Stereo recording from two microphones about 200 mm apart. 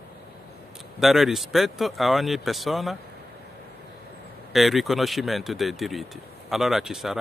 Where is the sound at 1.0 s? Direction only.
Centre (ahead or behind).